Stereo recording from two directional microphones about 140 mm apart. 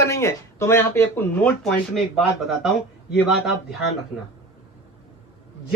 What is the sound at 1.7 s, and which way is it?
Speech, centre (ahead or behind).